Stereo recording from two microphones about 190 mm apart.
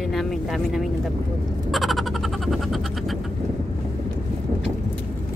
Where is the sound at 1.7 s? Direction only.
Centre (ahead or behind).